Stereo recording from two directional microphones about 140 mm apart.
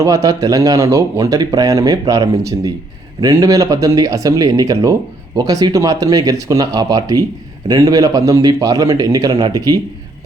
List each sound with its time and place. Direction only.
0.0 s speech: 25° right (ahead or behind)